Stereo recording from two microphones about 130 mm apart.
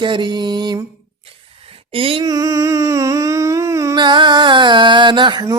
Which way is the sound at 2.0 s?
45° right (ahead or behind).